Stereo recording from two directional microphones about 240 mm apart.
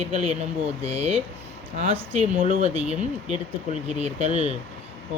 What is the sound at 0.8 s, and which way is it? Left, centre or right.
Speech, right.